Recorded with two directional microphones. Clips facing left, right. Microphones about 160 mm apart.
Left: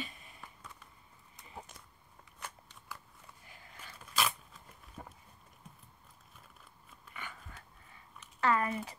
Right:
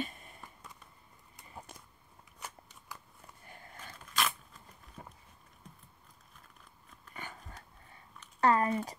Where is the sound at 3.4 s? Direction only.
50° right (ahead or behind).